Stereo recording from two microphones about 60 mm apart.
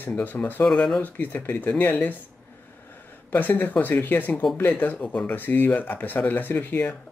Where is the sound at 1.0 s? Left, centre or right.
Left.